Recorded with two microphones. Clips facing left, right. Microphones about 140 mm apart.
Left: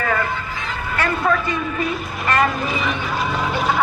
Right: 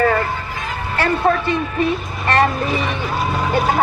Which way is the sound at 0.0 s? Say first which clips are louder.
Right 5 dB; 35° right (ahead or behind).